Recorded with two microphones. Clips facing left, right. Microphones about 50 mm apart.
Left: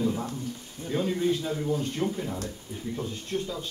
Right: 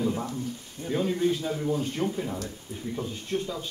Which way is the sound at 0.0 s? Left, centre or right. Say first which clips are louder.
Even; centre.